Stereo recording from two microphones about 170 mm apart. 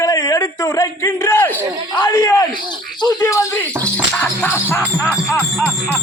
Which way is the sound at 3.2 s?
15° left (ahead or behind).